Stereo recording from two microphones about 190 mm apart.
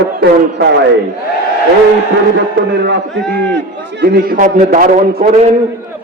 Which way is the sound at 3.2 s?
5° left (ahead or behind).